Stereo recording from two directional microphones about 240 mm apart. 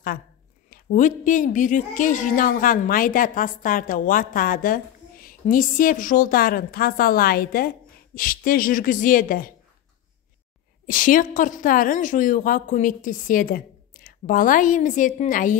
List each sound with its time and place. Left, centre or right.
0.7 s a woman's voice: left
10.9 s a woman's voice: left